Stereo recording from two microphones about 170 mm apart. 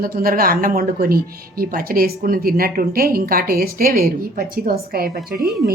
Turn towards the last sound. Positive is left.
turn(degrees=-65)  # may be behind; listen again after turning